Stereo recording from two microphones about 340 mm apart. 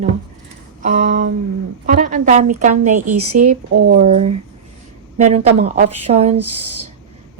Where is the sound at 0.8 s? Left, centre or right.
Right.